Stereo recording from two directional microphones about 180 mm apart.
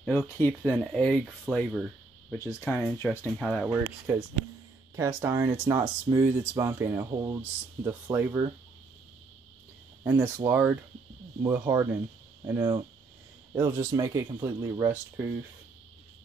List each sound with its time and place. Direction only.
0.0 s speech: 10° left (ahead or behind)
2.3 s speech: 15° left (ahead or behind)
3.3 s speech: centre (ahead or behind)
4.9 s speech: 15° right (ahead or behind)
10.0 s speech: 10° right (ahead or behind)